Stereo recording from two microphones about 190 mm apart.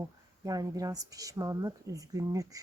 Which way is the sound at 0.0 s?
20° right (ahead or behind).